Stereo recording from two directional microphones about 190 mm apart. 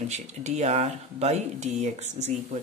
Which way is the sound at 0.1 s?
40° right (ahead or behind).